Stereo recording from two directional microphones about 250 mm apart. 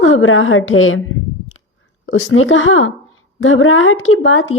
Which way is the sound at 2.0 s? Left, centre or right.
Left.